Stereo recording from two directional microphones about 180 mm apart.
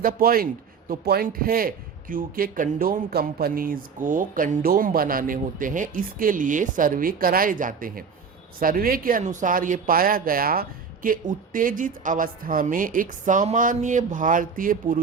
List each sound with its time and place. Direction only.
0.0 s a man's voice: 55° right (ahead or behind)